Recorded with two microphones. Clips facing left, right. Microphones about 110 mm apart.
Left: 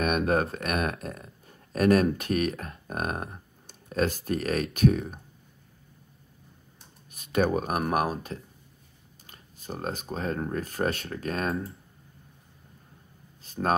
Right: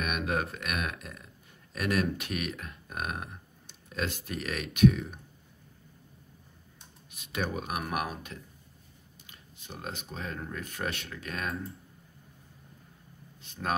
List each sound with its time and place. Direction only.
0.0 s speech: 35° left (ahead or behind)
7.1 s speech: 45° left (ahead or behind)
13.4 s speech: 40° left (ahead or behind)